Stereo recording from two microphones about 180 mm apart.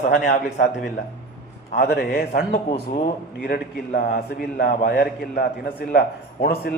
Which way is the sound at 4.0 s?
60° left (ahead or behind).